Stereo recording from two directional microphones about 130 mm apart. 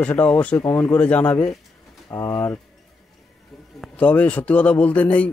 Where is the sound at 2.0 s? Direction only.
25° left (ahead or behind).